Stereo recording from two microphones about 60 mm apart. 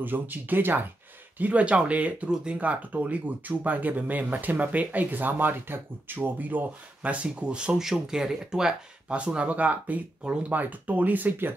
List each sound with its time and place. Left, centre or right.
0.0 s speech: right
1.4 s speech: right